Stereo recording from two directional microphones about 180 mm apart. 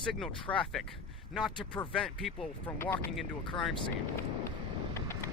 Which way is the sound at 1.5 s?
25° left (ahead or behind).